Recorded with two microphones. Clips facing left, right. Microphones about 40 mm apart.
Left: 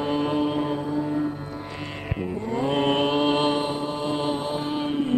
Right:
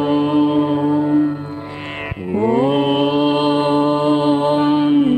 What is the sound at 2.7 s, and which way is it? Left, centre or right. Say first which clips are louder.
Mantra: right 6 dB; centre.